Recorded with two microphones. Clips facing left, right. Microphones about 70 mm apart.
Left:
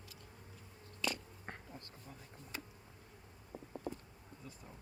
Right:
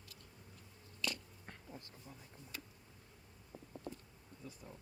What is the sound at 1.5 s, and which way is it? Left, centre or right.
Insect, left.